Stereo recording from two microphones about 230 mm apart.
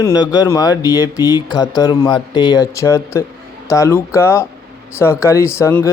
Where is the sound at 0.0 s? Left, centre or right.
Centre.